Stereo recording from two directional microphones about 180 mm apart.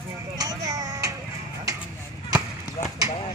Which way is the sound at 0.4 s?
20° right (ahead or behind).